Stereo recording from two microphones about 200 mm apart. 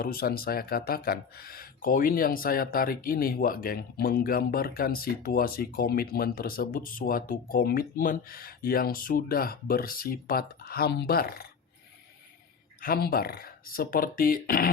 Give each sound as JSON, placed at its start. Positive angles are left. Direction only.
{"t": 0.0, "sound": "speech", "side_deg": 50}
{"t": 12.8, "sound": "speech", "side_deg": 50}